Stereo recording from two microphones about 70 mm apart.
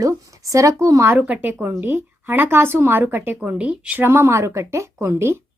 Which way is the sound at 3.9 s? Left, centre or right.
Right.